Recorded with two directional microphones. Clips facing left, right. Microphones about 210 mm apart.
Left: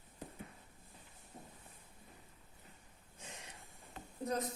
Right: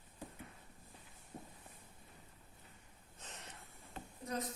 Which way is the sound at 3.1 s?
10° left (ahead or behind).